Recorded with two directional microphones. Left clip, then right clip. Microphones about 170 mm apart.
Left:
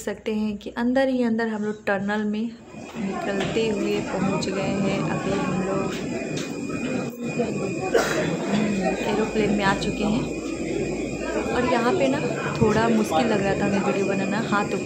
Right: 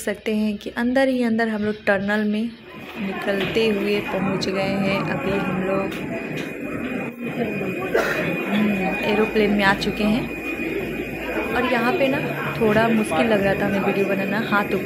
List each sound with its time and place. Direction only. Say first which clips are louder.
0.3 s speech: right 3 dB; 5° right (ahead or behind)
9.0 s speech: right 7 dB; 10° right (ahead or behind)
11.5 s a woman's voice: right 1 dB; 5° right (ahead or behind)